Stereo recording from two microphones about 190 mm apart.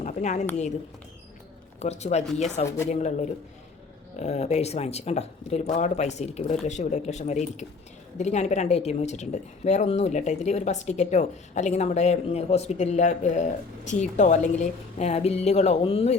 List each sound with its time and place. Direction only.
0.0 s a sound: 40° left (ahead or behind)
1.8 s a woman's voice: 35° left (ahead or behind)
2.6 s speech: 15° left (ahead or behind)
2.9 s a woman's voice: 35° left (ahead or behind)